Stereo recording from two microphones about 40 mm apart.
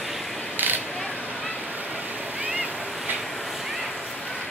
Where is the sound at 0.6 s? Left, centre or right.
Right.